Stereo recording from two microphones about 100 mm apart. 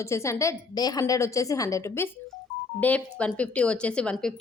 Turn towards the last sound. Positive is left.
turn(degrees=10)  # may be behind; listen again after turning